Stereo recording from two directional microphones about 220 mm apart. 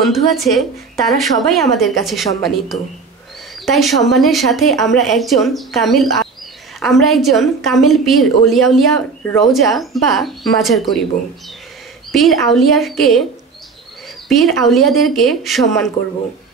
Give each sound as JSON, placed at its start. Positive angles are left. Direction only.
{"t": 0.0, "sound": "a woman's voice", "side_deg": 0}
{"t": 12.5, "sound": "a woman's voice", "side_deg": 0}
{"t": 14.3, "sound": "a woman's voice", "side_deg": 0}